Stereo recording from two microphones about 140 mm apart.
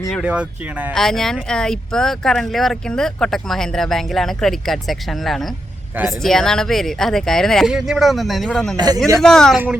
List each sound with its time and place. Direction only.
0.1 s speech: 5° right (ahead or behind)
0.9 s speech: 5° left (ahead or behind)
8.7 s a man's voice: 30° right (ahead or behind)
9.2 s speech: 5° left (ahead or behind)